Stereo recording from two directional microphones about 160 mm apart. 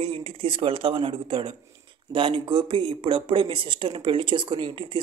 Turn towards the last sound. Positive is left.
turn(degrees=-30)  # may be behind; listen again after turning